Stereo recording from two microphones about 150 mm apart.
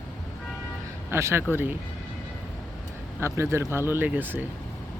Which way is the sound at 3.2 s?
20° right (ahead or behind).